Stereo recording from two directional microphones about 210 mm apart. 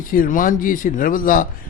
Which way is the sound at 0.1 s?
40° left (ahead or behind).